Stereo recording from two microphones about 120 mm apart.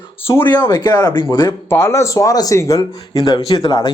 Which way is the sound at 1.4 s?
20° left (ahead or behind).